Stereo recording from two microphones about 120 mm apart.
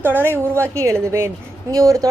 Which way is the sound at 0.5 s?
25° right (ahead or behind).